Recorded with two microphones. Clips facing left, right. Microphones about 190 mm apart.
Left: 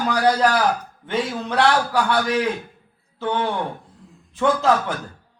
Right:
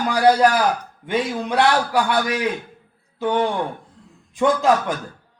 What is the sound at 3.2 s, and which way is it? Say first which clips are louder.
A man's voice: right 3 dB; 15° right (ahead or behind).